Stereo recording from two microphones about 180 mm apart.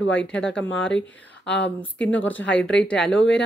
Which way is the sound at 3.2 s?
80° left.